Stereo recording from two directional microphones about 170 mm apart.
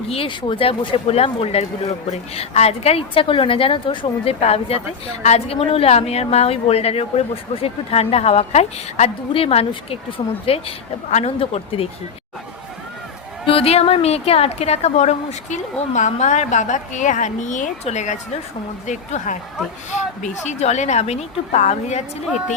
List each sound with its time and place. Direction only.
0.1 s a woman's voice: 30° left (ahead or behind)
13.4 s a woman's voice: 30° left (ahead or behind)